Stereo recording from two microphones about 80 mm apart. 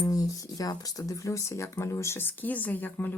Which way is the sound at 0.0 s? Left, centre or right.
Left.